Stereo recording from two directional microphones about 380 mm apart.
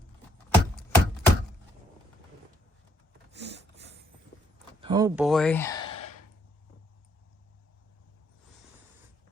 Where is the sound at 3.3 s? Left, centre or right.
Right.